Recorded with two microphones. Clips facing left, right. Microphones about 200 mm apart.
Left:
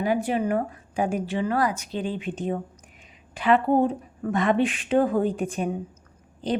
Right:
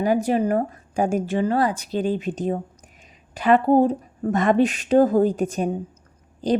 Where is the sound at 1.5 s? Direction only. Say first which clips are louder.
Right 3 dB; 30° right (ahead or behind).